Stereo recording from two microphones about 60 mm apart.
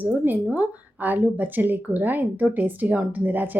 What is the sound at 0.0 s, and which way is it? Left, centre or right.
A woman's voice, right.